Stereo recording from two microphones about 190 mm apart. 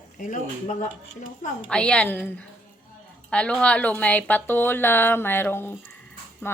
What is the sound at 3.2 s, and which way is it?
A woman's voice, 5° left (ahead or behind).